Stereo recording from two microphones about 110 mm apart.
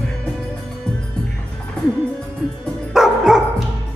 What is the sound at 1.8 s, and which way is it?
Music, 10° left (ahead or behind).